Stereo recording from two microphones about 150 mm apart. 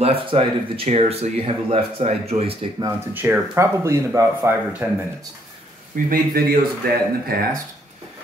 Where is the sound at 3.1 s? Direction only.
15° right (ahead or behind).